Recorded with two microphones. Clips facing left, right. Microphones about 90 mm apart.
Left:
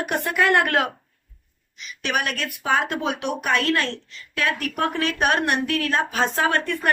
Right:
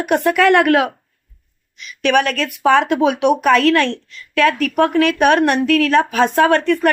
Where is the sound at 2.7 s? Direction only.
90° right; by 4.0 s 70° right (ahead or behind).